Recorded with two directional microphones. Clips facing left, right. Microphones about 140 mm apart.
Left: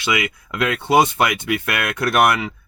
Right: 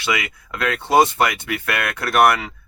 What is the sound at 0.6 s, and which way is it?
Speech, 15° left (ahead or behind).